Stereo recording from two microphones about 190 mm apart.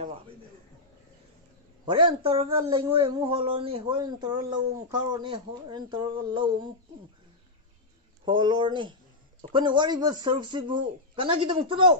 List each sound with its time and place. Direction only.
1.9 s speech: 25° right (ahead or behind)
8.3 s speech: 25° right (ahead or behind)